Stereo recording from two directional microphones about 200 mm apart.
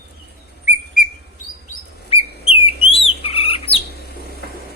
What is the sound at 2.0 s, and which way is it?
Bird, 30° left (ahead or behind).